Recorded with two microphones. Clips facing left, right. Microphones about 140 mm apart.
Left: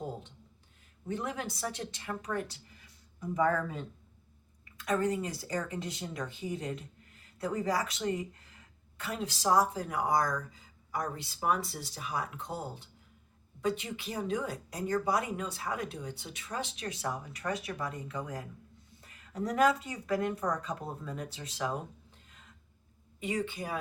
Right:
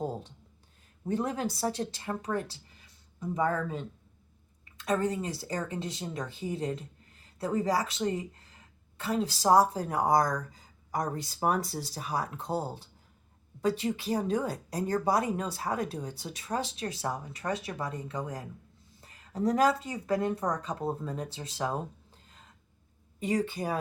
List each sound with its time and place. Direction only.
1.0 s speech: 35° right (ahead or behind)
22.3 s a sound: 35° right (ahead or behind)
23.2 s speech: 35° right (ahead or behind)